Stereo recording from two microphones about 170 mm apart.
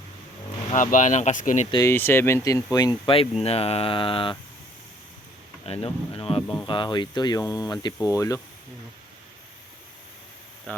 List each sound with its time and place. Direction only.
0.7 s speech: 50° left (ahead or behind)
1.7 s speech: 15° left (ahead or behind)
5.6 s speech: 35° left (ahead or behind)
10.7 s speech: 5° left (ahead or behind)